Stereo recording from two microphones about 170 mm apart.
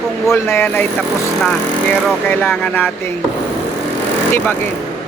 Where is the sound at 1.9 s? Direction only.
10° left (ahead or behind).